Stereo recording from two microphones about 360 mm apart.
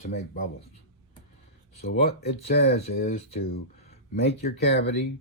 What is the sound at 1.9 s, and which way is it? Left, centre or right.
Speech, left.